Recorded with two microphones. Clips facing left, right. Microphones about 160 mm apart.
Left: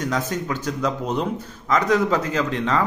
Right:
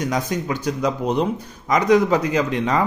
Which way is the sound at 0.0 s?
15° right (ahead or behind).